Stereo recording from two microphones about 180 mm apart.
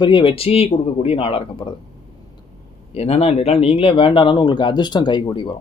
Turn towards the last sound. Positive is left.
turn(degrees=25)  # may be behind; listen again after turning